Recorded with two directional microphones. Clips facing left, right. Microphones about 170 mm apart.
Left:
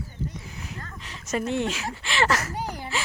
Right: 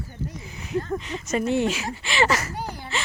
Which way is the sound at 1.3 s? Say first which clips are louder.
Right 3 dB; centre (ahead or behind).